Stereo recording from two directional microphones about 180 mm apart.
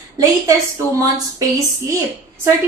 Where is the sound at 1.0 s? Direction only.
15° right (ahead or behind).